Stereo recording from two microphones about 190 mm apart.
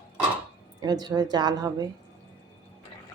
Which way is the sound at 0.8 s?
20° right (ahead or behind).